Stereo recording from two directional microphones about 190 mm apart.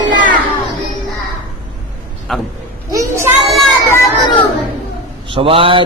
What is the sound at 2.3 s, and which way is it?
Speech, centre (ahead or behind).